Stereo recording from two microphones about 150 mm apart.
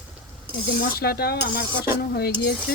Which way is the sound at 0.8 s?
90° left.